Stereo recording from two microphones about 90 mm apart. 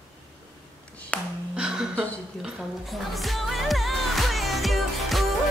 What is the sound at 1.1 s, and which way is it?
Music, 15° left (ahead or behind).